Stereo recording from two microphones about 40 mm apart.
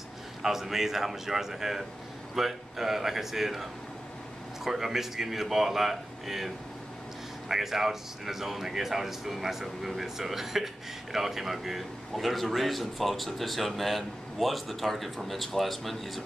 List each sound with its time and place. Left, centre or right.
0.4 s speech: centre
4.6 s speech: centre